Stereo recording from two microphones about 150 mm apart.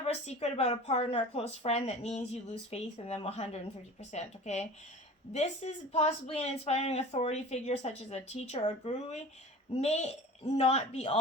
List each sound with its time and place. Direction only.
0.0 s speech: 45° left (ahead or behind)